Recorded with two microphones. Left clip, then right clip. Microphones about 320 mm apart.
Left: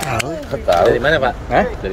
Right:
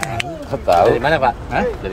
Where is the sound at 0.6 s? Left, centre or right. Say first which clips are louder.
Even; right.